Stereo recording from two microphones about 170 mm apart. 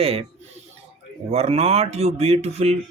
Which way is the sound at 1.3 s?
40° right (ahead or behind).